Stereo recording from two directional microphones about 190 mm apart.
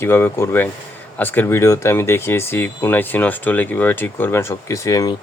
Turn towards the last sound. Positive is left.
turn(degrees=20)  # may be behind; listen again after turning